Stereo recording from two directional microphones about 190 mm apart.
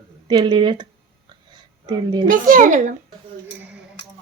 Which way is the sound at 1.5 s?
20° right (ahead or behind).